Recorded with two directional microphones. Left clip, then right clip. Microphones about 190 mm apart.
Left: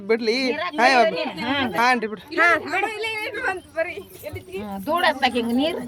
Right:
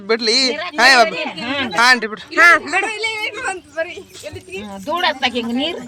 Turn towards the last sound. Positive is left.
turn(degrees=-35)  # may be behind; listen again after turning